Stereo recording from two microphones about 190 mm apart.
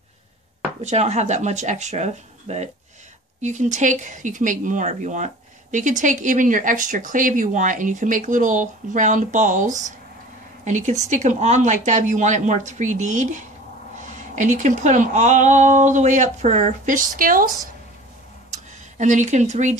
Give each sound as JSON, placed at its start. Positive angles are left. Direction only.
{"t": 0.8, "sound": "speech", "side_deg": -35}
{"t": 18.9, "sound": "speech", "side_deg": -40}